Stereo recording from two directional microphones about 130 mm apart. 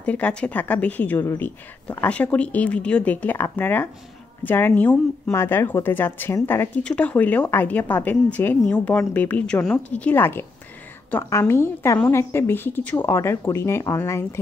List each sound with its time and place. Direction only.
0.0 s a woman's voice: 10° left (ahead or behind)